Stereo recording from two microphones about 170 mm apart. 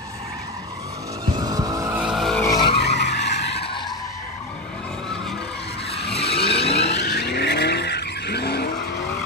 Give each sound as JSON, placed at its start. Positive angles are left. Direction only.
{"t": 1.4, "sound": "vehicle", "side_deg": -20}
{"t": 2.1, "sound": "vehicle", "side_deg": 0}
{"t": 2.4, "sound": "vehicle", "side_deg": 20}
{"t": 2.8, "sound": "vehicle", "side_deg": 85}
{"t": 6.1, "sound": "vehicle", "side_deg": 35}
{"t": 7.0, "sound": "vehicle", "side_deg": 90}